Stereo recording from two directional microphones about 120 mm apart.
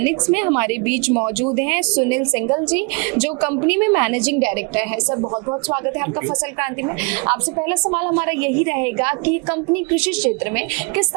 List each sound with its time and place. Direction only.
0.0 s a woman's voice: 20° right (ahead or behind)